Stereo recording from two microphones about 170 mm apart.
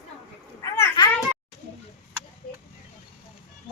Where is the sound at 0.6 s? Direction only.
15° left (ahead or behind).